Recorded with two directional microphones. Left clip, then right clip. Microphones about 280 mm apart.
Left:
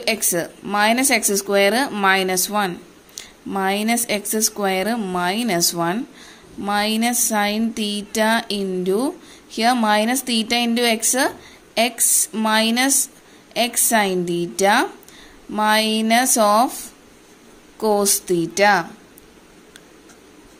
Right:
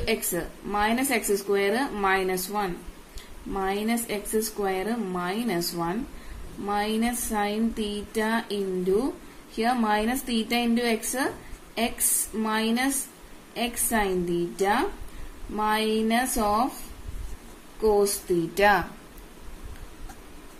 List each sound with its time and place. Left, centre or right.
0.0 s speech: left
17.7 s speech: left